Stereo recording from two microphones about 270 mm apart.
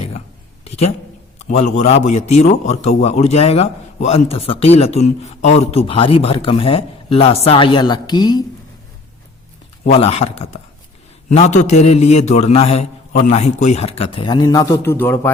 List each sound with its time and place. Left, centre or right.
0.6 s a sound: left
1.4 s a man's voice: left
9.8 s a man's voice: left; by 15.3 s centre